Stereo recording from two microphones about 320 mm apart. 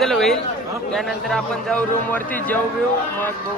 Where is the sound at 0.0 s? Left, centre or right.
Centre.